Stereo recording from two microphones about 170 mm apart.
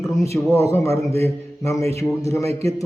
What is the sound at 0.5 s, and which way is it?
A man's voice, 15° left (ahead or behind).